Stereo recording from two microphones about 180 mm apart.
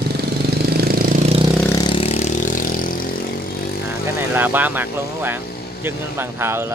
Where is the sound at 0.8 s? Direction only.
55° right (ahead or behind).